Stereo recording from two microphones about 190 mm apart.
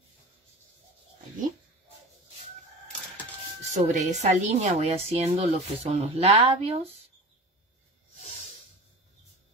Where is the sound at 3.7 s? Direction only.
40° right (ahead or behind).